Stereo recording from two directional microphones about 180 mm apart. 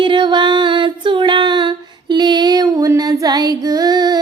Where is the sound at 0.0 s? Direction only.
25° right (ahead or behind).